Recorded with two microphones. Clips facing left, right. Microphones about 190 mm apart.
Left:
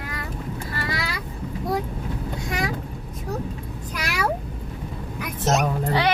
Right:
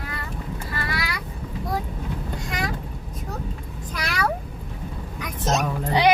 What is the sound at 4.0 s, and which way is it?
Cat, 10° left (ahead or behind).